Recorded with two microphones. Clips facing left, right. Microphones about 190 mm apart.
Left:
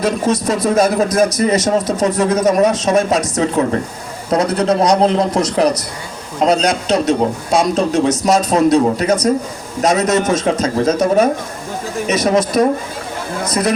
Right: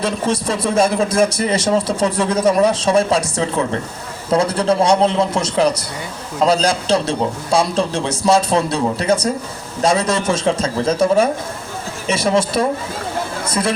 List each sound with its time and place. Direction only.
0.0 s speech: 30° right (ahead or behind)